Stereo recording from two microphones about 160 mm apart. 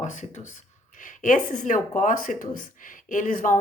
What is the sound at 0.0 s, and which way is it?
A woman's voice, 50° left (ahead or behind).